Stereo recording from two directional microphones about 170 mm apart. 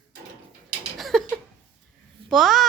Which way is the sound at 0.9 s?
Centre (ahead or behind).